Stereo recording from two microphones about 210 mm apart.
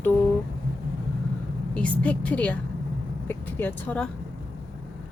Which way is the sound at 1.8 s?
5° left (ahead or behind).